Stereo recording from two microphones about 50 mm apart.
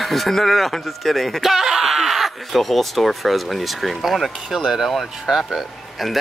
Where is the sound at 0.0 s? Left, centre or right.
Centre.